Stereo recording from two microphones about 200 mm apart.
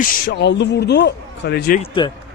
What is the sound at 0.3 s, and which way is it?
A man's voice, 60° left (ahead or behind).